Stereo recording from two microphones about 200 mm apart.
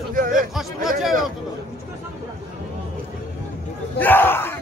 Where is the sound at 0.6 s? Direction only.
Centre (ahead or behind).